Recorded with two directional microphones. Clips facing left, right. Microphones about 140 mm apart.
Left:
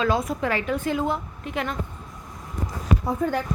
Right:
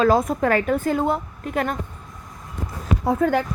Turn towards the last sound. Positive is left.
turn(degrees=-85)